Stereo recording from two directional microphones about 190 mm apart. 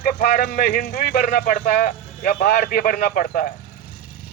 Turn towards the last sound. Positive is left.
turn(degrees=45)  # may be behind; listen again after turning